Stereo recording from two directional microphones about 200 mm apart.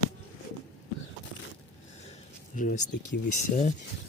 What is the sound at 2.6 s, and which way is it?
Speech, 40° left (ahead or behind).